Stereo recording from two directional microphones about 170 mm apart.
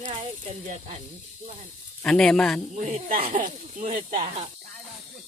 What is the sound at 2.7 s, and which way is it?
Speech, 45° right (ahead or behind).